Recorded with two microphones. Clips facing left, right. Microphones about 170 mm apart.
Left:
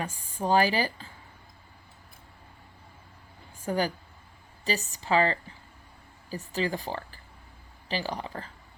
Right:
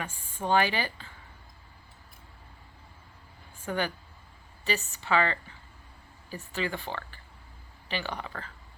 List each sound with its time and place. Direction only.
0.0 s a woman's voice: 40° left (ahead or behind)
3.7 s a woman's voice: 35° left (ahead or behind)